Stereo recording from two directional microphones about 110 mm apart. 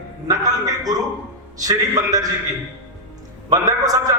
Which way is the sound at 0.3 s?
35° right (ahead or behind).